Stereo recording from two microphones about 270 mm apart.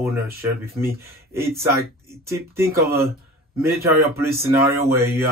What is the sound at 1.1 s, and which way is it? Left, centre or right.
Speech, right.